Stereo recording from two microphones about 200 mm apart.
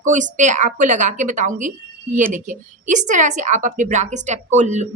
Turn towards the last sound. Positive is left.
turn(degrees=-35)  # may be behind; listen again after turning